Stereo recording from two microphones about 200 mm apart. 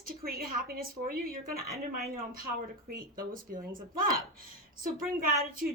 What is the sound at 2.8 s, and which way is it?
A woman's voice, 45° right (ahead or behind).